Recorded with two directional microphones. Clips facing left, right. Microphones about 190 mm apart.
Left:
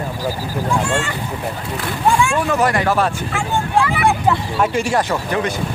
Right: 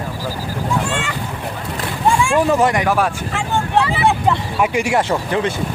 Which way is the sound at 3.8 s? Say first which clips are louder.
Left 1 dB; 25° right (ahead or behind).